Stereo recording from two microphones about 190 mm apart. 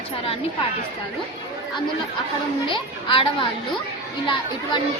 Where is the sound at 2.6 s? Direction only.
25° left (ahead or behind).